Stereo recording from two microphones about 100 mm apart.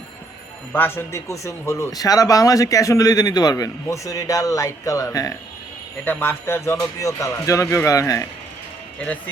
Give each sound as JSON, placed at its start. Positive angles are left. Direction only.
{"t": 0.7, "sound": "speech", "side_deg": 20}
{"t": 6.1, "sound": "speech", "side_deg": 20}
{"t": 9.0, "sound": "a man's voice", "side_deg": 15}